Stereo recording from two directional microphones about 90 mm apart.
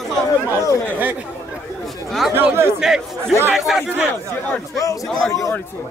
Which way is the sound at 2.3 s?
25° right (ahead or behind).